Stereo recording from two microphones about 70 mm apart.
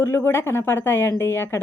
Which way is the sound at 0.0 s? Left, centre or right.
Left.